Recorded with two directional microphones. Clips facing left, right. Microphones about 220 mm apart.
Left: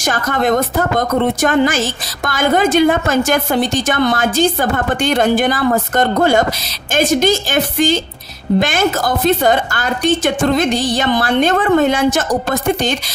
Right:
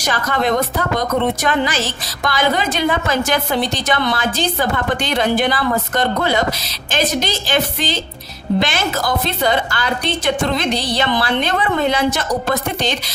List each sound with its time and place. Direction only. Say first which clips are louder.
0.0 s a woman's voice: left 3 dB; 50° left (ahead or behind)